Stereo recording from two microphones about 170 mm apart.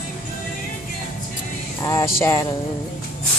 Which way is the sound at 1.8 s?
20° left (ahead or behind).